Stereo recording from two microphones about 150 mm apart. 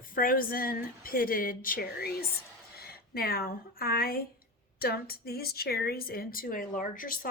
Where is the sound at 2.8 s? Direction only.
90° left.